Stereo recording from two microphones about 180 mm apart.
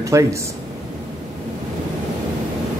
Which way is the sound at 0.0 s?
15° right (ahead or behind).